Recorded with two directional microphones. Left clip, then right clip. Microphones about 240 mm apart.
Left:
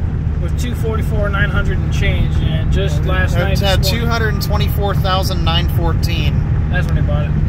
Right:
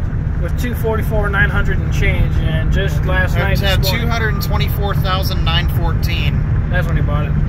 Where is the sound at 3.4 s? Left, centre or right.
Left.